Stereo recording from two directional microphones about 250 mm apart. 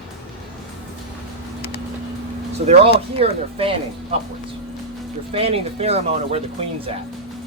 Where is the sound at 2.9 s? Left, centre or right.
Right.